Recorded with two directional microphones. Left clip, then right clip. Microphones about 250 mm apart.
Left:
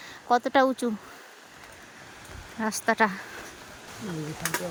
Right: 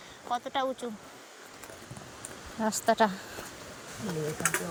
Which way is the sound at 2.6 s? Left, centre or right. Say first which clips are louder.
Left 1 dB; centre.